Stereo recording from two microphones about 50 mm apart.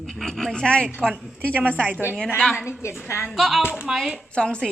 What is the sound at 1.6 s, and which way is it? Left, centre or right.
Speech, left.